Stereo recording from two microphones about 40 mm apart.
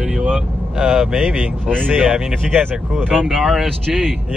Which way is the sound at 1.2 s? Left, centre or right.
Right.